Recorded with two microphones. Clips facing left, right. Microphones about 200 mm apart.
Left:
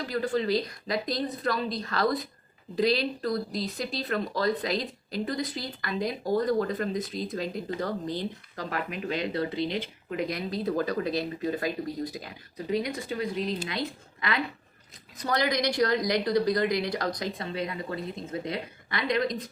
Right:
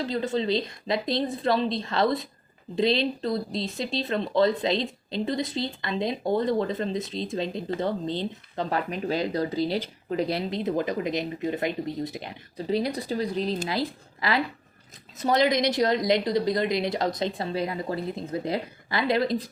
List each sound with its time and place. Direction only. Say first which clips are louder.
0.0 s speech: right 1 dB; 25° right (ahead or behind)
15.2 s speech: right 5 dB; 20° right (ahead or behind)